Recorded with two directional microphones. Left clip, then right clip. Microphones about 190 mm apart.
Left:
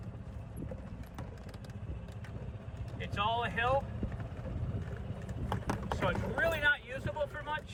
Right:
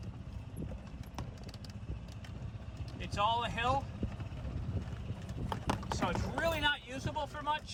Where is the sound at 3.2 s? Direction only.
25° right (ahead or behind).